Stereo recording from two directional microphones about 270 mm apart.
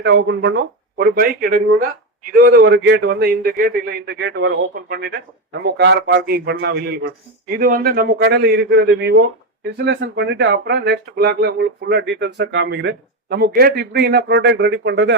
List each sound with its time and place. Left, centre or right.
0.0 s speech: right